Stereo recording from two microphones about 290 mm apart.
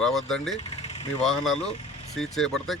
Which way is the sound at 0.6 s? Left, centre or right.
Left.